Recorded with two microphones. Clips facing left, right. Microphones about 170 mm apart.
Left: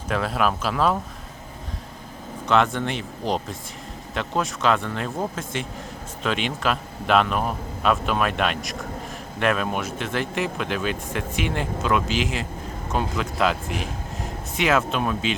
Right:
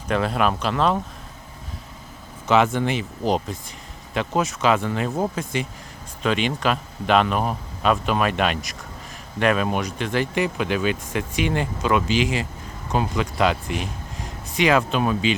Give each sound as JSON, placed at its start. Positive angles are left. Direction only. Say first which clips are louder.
{"t": 0.1, "sound": "speech", "louder": "right 2 dB", "side_deg": 0}
{"t": 2.5, "sound": "a man's voice", "louder": "right 2 dB", "side_deg": 0}